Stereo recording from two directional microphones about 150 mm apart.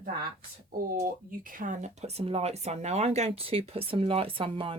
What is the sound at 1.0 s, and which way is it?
Speech, 65° right (ahead or behind).